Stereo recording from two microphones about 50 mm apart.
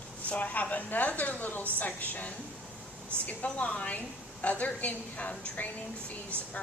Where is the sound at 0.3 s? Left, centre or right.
Left.